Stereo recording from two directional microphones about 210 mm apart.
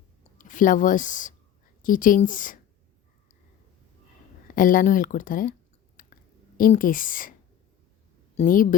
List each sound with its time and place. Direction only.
0.3 s speech: 40° left (ahead or behind)
4.4 s speech: 40° left (ahead or behind)
6.0 s a sound: 40° left (ahead or behind)
6.6 s speech: 40° left (ahead or behind)
8.4 s speech: 40° left (ahead or behind)